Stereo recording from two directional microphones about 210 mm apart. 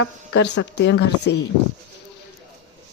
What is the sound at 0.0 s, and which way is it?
Speech, 60° left (ahead or behind).